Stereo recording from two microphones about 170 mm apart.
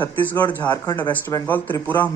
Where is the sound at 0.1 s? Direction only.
10° left (ahead or behind).